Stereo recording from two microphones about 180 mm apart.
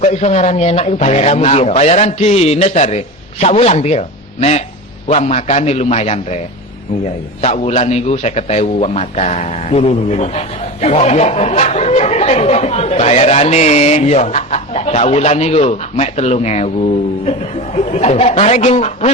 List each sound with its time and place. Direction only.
0.0 s a man's voice: 35° left (ahead or behind)
7.4 s a man's voice: 35° left (ahead or behind)
17.7 s a man's voice: 35° left (ahead or behind)